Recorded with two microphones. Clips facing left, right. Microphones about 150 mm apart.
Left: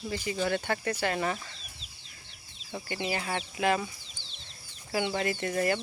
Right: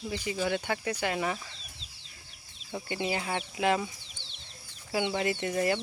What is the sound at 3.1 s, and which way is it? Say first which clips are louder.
Speech: left 1 dB; 20° right (ahead or behind).